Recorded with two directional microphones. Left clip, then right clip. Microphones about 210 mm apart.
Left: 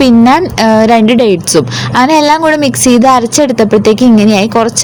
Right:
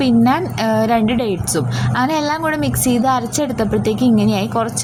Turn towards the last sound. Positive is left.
turn(degrees=35)  # may be behind; listen again after turning